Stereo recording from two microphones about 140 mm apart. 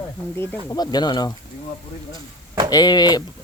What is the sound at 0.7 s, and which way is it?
Speech, 30° left (ahead or behind).